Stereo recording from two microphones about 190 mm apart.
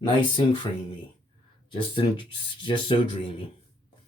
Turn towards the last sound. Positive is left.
turn(degrees=25)  # may be behind; listen again after turning